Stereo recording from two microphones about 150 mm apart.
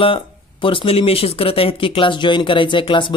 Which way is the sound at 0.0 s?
35° left (ahead or behind).